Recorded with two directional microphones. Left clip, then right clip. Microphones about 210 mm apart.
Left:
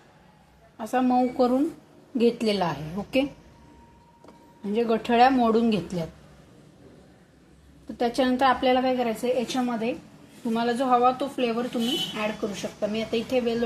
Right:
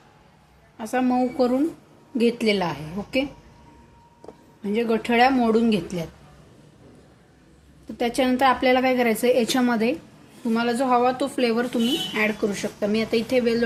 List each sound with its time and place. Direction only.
0.8 s speech: centre (ahead or behind)
4.6 s speech: centre (ahead or behind)
7.9 s a woman's voice: centre (ahead or behind); by 9.9 s 35° right (ahead or behind)
10.5 s a woman's voice: 10° right (ahead or behind)